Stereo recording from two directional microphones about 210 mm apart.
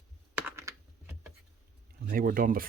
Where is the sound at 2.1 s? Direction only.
40° right (ahead or behind).